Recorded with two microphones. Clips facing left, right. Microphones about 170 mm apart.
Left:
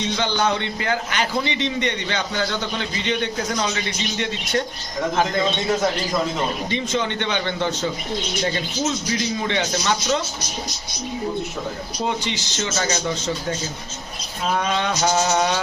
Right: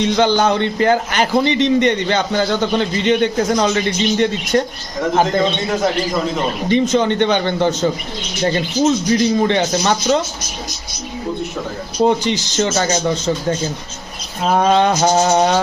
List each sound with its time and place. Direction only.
0.0 s a man's voice: 50° right (ahead or behind)
6.7 s speech: 40° right (ahead or behind)
9.1 s a man's voice: 45° right (ahead or behind)
12.0 s speech: 40° right (ahead or behind)
14.4 s a man's voice: 45° right (ahead or behind)